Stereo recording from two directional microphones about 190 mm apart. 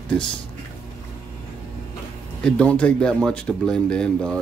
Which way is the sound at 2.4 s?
5° left (ahead or behind).